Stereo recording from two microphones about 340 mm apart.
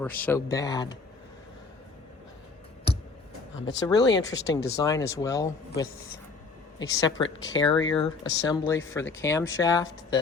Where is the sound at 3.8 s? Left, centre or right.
Centre.